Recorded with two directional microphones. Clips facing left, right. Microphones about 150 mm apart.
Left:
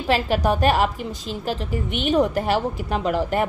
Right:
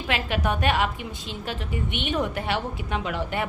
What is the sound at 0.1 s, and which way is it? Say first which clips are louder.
A woman's voice: left 6 dB; 35° left (ahead or behind).